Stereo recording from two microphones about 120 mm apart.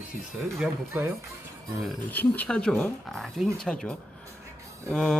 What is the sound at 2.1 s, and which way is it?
Speech, 15° left (ahead or behind).